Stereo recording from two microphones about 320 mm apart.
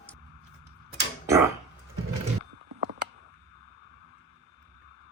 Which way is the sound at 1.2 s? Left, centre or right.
Centre.